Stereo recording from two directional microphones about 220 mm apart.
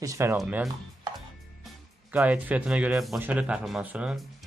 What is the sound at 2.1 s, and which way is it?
Speech, 5° right (ahead or behind).